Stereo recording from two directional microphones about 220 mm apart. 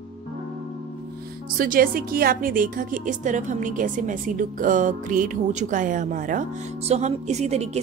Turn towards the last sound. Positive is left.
turn(degrees=-30)  # may be behind; listen again after turning